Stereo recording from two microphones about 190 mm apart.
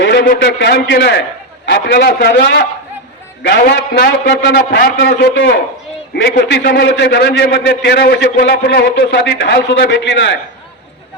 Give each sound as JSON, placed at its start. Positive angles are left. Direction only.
{"t": 0.0, "sound": "a man's voice", "side_deg": 65}